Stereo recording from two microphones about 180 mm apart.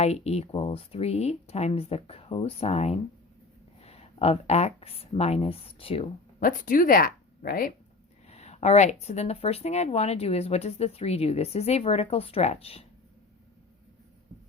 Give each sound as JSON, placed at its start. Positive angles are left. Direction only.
{"t": 0.0, "sound": "speech", "side_deg": 35}
{"t": 6.4, "sound": "speech", "side_deg": 50}
{"t": 8.3, "sound": "speech", "side_deg": 35}